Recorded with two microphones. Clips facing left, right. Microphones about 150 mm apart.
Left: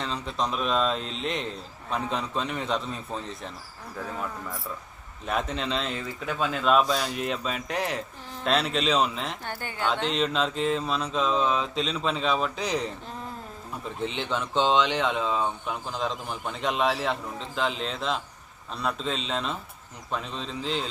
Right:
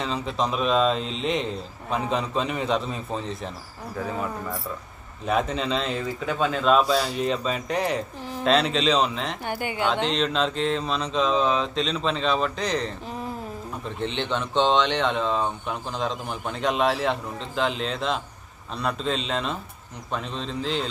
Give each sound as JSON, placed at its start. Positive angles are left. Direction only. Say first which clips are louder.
{"t": 0.0, "sound": "speech", "louder": "right 3 dB", "side_deg": 0}
{"t": 6.8, "sound": "speech", "louder": "right 4 dB", "side_deg": -10}
{"t": 7.2, "sound": "speech", "louder": "right 4 dB", "side_deg": 5}
{"t": 9.4, "sound": "speech", "louder": "right 6 dB", "side_deg": -15}
{"t": 9.9, "sound": "speech", "louder": "left 1 dB", "side_deg": 5}